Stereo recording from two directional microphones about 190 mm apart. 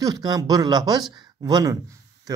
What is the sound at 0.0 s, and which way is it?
A man's voice, 20° right (ahead or behind).